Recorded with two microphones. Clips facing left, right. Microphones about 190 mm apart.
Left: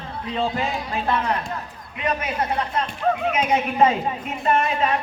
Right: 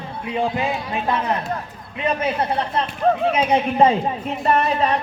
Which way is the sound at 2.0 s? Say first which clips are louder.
Right 3 dB; 30° right (ahead or behind).